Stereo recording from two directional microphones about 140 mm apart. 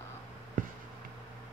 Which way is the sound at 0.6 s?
70° right (ahead or behind).